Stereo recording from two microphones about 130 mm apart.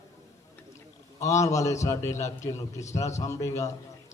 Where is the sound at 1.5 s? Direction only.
25° left (ahead or behind).